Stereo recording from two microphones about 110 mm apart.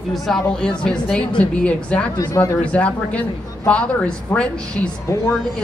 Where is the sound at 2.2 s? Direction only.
30° left (ahead or behind).